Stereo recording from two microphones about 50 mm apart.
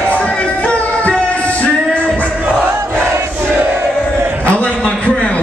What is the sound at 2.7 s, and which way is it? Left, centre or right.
Crowd, right.